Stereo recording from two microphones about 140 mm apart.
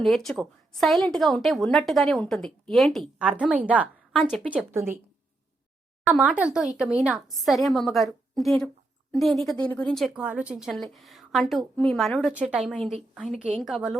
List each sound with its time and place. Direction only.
0.0 s a woman's voice: centre (ahead or behind)
3.2 s a woman's voice: 10° right (ahead or behind)
4.1 s speech: centre (ahead or behind)
4.5 s a woman's voice: 15° right (ahead or behind)
6.1 s a woman's voice: 10° right (ahead or behind)